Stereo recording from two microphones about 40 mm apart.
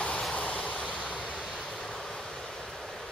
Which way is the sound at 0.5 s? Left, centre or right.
Left.